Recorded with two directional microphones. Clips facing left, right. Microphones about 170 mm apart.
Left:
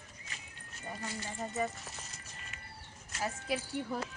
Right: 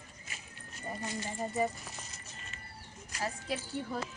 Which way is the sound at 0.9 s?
15° right (ahead or behind).